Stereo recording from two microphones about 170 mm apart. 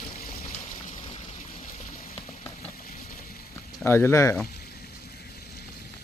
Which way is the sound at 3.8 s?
15° left (ahead or behind).